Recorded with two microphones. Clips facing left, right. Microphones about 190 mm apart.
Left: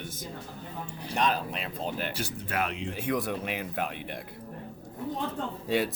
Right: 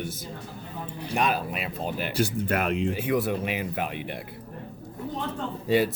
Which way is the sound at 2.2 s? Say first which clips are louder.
Right 6 dB; 50° right (ahead or behind).